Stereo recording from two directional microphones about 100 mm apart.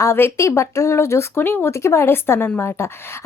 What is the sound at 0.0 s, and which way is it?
Speech, 25° left (ahead or behind).